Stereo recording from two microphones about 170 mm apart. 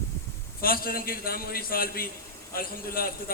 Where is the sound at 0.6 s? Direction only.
60° left (ahead or behind).